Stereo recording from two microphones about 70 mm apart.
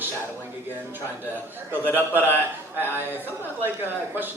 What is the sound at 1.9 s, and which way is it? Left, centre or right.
Speech, right.